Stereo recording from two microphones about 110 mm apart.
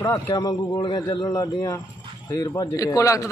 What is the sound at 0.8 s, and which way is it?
Speech, 40° left (ahead or behind).